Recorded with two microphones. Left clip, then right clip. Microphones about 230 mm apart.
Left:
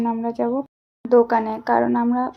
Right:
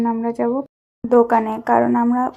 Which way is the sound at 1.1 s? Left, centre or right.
Centre.